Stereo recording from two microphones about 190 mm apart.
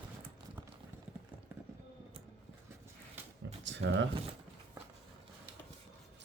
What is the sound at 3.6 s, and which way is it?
Speech, 70° right (ahead or behind).